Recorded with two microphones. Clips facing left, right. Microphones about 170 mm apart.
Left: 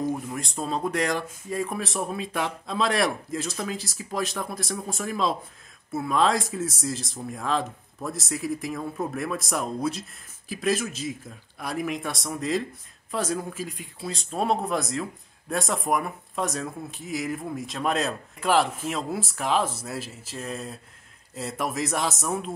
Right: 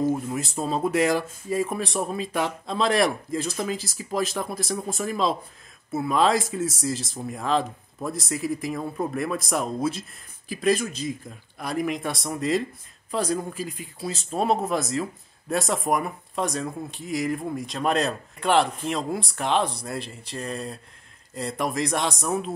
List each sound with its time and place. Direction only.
0.0 s speech: 5° right (ahead or behind)